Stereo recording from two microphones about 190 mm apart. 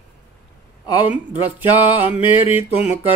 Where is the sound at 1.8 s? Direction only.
30° left (ahead or behind).